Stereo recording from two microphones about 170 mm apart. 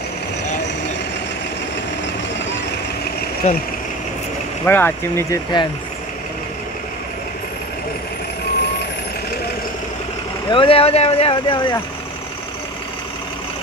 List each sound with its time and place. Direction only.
3.4 s speech: 45° left (ahead or behind)
4.6 s speech: 10° left (ahead or behind)
10.5 s speech: 30° left (ahead or behind)